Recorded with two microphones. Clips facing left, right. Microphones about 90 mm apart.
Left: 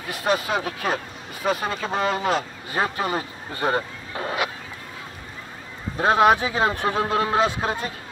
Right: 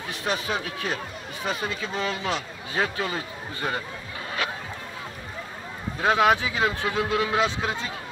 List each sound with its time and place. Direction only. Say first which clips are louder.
0.1 s a man's voice: left 5 dB; 45° left (ahead or behind)
5.9 s a man's voice: left 3 dB; 35° left (ahead or behind)